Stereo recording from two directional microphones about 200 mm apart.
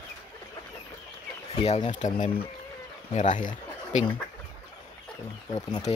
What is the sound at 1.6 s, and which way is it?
Speech, 30° left (ahead or behind).